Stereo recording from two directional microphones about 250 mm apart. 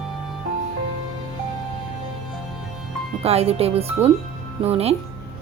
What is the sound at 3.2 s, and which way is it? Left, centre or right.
Speech, right.